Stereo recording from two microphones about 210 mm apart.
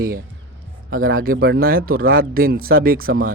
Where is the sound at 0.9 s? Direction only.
45° right (ahead or behind).